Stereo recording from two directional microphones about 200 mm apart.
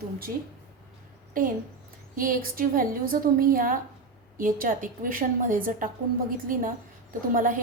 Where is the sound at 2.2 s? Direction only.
45° right (ahead or behind).